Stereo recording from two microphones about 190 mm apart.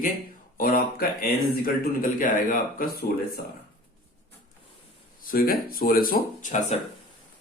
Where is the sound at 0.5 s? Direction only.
50° left (ahead or behind).